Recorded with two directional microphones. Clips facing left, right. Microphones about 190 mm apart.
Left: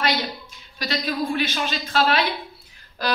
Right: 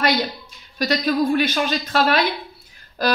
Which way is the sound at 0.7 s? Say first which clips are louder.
Right 6 dB; 45° right (ahead or behind).